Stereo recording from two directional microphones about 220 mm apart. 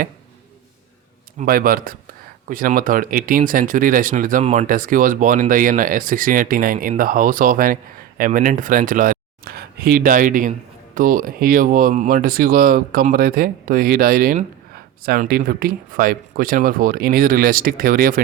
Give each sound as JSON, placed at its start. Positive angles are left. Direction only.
{"t": 1.4, "sound": "speech", "side_deg": -40}